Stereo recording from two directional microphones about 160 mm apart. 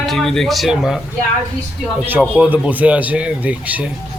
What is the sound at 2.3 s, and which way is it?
Speech, 10° right (ahead or behind).